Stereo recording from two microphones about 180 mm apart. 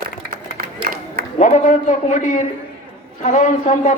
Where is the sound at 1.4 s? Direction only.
45° left (ahead or behind).